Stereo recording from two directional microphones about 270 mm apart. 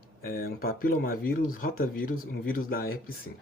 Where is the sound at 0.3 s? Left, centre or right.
Left.